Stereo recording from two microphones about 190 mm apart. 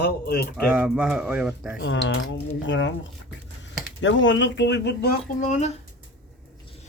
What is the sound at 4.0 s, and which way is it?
Speech, 75° left (ahead or behind).